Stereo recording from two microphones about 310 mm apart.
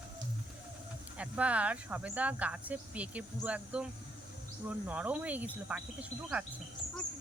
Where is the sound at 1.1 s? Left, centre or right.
Centre.